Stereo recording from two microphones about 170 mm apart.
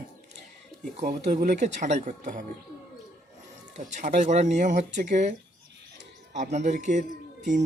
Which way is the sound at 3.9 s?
45° right (ahead or behind).